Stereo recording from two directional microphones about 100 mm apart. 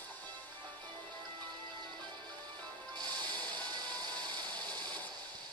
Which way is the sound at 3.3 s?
45° right (ahead or behind).